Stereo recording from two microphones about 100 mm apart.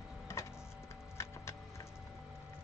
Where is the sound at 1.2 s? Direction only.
25° left (ahead or behind).